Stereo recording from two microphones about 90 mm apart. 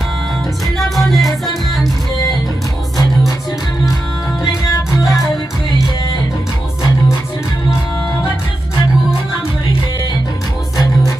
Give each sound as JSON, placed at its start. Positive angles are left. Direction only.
{"t": 0.7, "sound": "music", "side_deg": 0}
{"t": 4.9, "sound": "music", "side_deg": 35}